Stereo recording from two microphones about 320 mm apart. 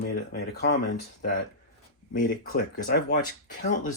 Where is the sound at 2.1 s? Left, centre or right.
Left.